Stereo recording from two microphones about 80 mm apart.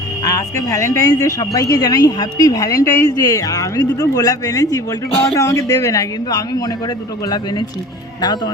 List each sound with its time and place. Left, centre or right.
0.3 s speech: left